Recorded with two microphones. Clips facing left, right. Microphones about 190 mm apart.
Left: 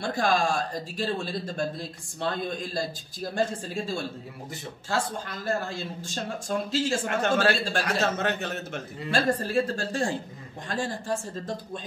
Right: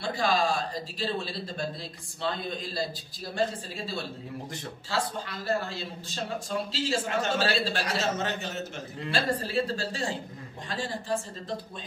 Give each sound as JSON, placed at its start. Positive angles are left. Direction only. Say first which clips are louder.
{"t": 0.0, "sound": "a man's voice", "louder": "left 2 dB", "side_deg": 50}